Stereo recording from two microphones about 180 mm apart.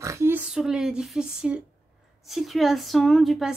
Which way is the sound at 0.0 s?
15° right (ahead or behind).